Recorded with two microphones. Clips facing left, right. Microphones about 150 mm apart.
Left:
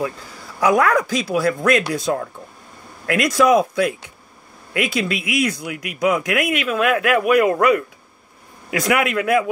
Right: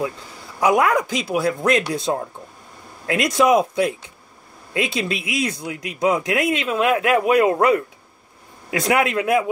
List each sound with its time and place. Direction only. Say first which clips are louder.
0.6 s speech: left 1 dB; 20° right (ahead or behind)